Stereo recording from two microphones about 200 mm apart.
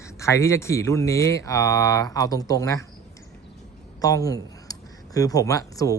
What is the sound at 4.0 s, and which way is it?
Speech, 15° left (ahead or behind).